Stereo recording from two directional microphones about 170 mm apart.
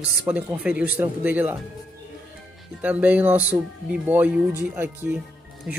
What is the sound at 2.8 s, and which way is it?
Speech, 10° right (ahead or behind).